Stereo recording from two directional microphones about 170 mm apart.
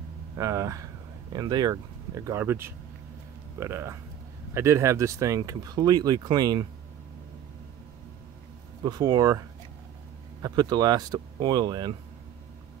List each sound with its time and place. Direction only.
0.4 s speech: 20° right (ahead or behind)
8.8 s speech: 25° right (ahead or behind)
10.4 s speech: 25° right (ahead or behind)